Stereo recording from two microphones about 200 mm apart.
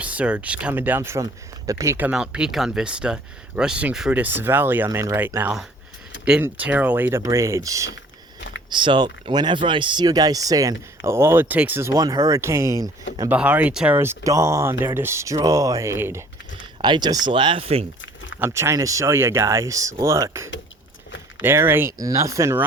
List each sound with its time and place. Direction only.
0.0 s speech: 5° right (ahead or behind); by 17.8 s 30° right (ahead or behind)
18.3 s speech: 10° right (ahead or behind)